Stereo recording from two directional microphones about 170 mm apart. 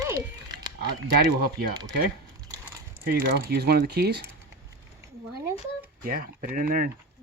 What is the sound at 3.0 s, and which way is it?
Speech, 60° right (ahead or behind).